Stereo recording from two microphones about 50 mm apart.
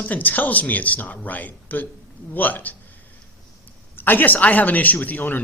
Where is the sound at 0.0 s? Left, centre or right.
Left.